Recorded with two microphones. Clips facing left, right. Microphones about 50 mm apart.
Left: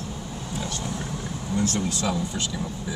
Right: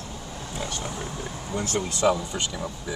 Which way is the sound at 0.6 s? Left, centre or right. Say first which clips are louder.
Right 1 dB; right.